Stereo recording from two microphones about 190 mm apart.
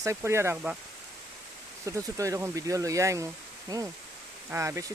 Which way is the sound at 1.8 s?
15° right (ahead or behind).